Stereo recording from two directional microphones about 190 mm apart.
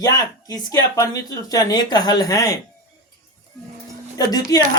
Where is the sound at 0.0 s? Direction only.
20° left (ahead or behind).